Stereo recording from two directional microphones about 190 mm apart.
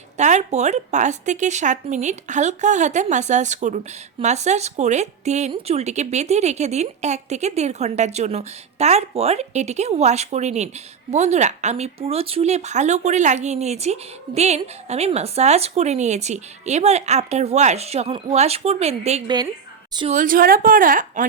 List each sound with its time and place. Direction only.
0.2 s speech: 40° right (ahead or behind)
20.1 s a woman's voice: 45° right (ahead or behind)